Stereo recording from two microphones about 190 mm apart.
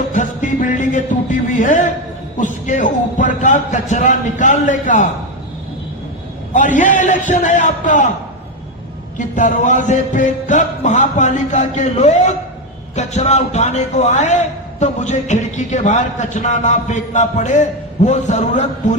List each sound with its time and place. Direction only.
0.1 s music: 40° left (ahead or behind)
2.4 s a man's voice: 40° left (ahead or behind)
6.5 s a man's voice: 40° left (ahead or behind)
9.1 s a man's voice: 40° left (ahead or behind)